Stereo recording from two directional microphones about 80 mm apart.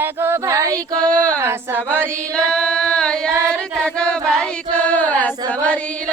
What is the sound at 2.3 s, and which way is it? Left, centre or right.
Singing, centre.